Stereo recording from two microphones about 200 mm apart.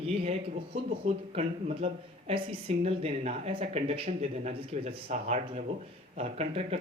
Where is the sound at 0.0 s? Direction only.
30° right (ahead or behind).